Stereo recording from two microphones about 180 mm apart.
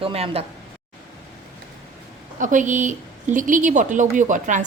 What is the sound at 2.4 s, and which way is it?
A woman's voice, 45° right (ahead or behind).